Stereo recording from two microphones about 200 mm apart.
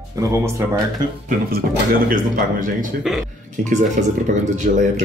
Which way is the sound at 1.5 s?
45° right (ahead or behind).